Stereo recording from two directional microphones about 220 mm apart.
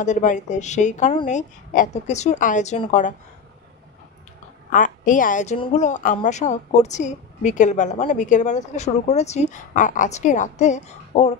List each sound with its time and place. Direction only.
0.0 s a woman's voice: 35° left (ahead or behind)
4.6 s a woman's voice: 35° left (ahead or behind)